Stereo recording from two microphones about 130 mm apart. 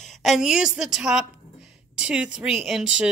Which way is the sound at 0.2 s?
5° right (ahead or behind).